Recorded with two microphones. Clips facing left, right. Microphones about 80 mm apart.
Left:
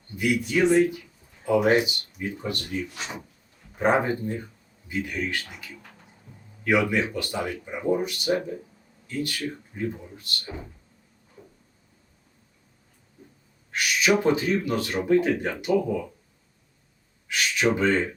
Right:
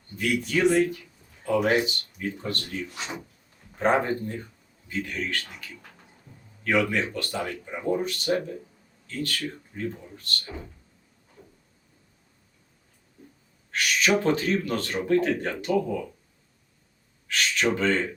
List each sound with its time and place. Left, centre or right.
0.2 s speech: centre
3.8 s speech: centre
13.7 s a sound: centre
14.1 s speech: centre
17.2 s speech: centre